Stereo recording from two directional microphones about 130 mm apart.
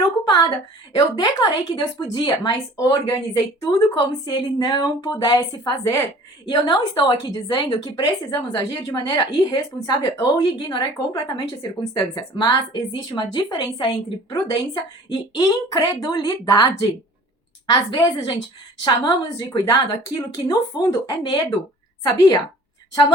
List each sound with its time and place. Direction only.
0.3 s a woman's voice: 30° left (ahead or behind)